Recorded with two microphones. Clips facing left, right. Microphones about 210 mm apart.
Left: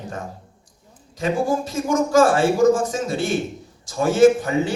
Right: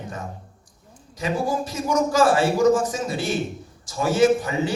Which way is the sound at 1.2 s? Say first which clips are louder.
Left 3 dB; 50° left (ahead or behind).